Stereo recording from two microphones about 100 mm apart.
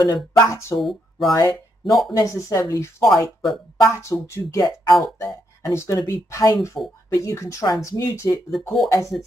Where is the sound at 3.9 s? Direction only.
30° left (ahead or behind).